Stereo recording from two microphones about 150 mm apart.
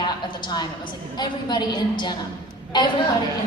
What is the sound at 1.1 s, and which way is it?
A woman's voice, 30° left (ahead or behind).